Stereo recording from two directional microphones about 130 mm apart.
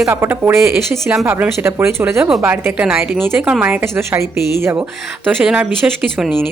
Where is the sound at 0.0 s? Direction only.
20° right (ahead or behind).